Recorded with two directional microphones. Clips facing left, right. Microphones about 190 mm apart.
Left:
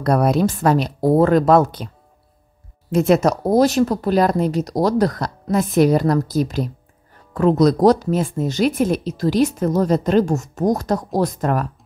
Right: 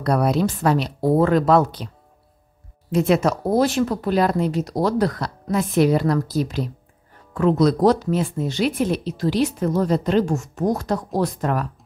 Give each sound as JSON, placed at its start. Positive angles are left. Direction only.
{"t": 0.0, "sound": "speech", "side_deg": 45}
{"t": 2.9, "sound": "speech", "side_deg": 45}